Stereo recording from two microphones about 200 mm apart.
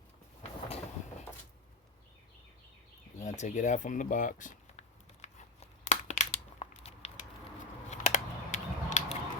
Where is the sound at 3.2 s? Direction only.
35° left (ahead or behind).